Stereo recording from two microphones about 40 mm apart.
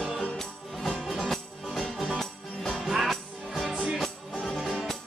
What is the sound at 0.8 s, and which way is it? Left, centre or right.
Music, centre.